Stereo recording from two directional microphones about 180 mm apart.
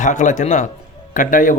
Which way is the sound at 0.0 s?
45° left (ahead or behind).